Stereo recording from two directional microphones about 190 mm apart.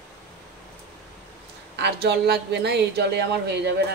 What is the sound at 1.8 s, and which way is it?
A woman's voice, 60° right (ahead or behind).